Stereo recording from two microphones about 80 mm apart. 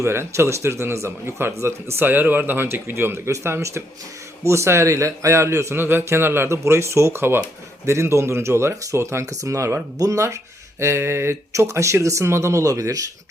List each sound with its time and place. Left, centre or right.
0.0 s a man's voice: right